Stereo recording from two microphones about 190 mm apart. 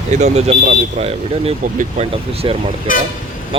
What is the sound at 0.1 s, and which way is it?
Speech, 35° right (ahead or behind).